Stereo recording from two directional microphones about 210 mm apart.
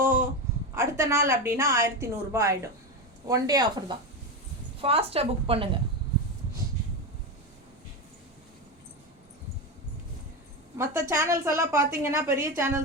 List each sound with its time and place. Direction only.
0.0 s a sound: 10° right (ahead or behind)
0.7 s a woman's voice: 15° right (ahead or behind)
11.1 s a woman's voice: 10° right (ahead or behind)